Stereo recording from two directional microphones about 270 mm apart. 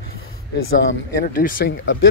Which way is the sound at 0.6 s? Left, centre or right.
Left.